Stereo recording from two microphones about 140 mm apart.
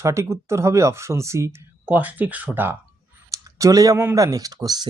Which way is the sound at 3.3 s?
25° right (ahead or behind).